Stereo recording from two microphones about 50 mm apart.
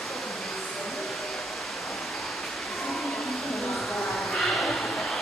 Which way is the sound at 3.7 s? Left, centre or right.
Centre.